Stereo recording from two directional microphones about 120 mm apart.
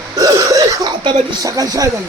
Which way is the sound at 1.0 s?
40° right (ahead or behind).